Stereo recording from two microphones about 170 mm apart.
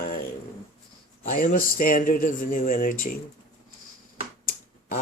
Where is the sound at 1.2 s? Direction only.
55° left (ahead or behind).